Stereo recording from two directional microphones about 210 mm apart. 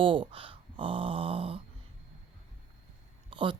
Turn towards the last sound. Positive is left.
turn(degrees=-25)  # may be behind; listen again after turning